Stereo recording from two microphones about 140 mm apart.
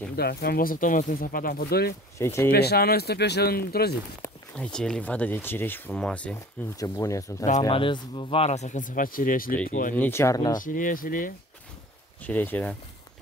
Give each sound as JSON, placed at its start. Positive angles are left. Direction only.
{"t": 0.1, "sound": "speech", "side_deg": 90}
{"t": 2.1, "sound": "speech", "side_deg": 20}
{"t": 2.5, "sound": "speech", "side_deg": 90}
{"t": 4.6, "sound": "speech", "side_deg": 5}
{"t": 6.8, "sound": "speech", "side_deg": 25}
{"t": 7.7, "sound": "speech", "side_deg": 35}
{"t": 9.9, "sound": "speech", "side_deg": 15}
{"t": 10.6, "sound": "speech", "side_deg": 75}
{"t": 12.3, "sound": "speech", "side_deg": 10}